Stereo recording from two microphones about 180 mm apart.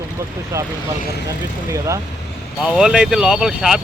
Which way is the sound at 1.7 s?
15° right (ahead or behind).